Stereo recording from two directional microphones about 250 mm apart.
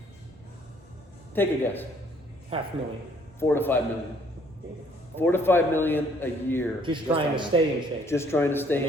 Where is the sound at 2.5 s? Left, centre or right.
Right.